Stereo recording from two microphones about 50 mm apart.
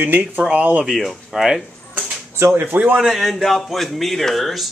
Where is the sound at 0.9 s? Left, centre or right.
Centre.